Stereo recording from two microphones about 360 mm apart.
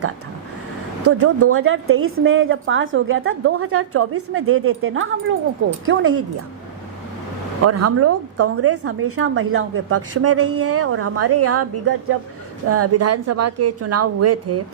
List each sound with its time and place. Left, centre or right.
1.0 s a woman's voice: right
7.6 s a woman's voice: right